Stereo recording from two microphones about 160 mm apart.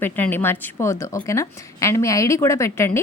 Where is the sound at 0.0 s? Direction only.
15° left (ahead or behind).